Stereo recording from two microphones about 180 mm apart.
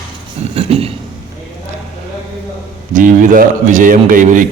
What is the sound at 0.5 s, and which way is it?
Speech, 35° right (ahead or behind).